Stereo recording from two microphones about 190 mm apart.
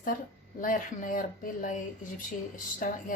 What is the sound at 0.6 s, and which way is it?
Speech, 45° left (ahead or behind).